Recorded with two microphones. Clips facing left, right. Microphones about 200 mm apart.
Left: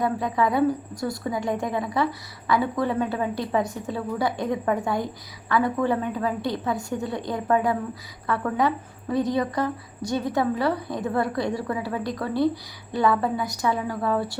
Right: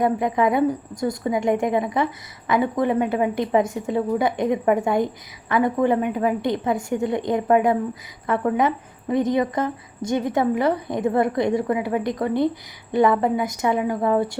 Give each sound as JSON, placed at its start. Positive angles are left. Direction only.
{"t": 0.0, "sound": "a woman's voice", "side_deg": -20}